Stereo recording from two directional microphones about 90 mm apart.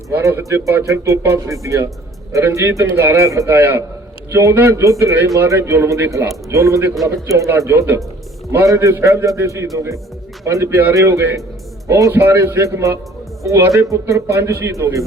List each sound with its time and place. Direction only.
0.2 s a man's voice: 35° right (ahead or behind)
3.5 s a man's voice: 25° right (ahead or behind)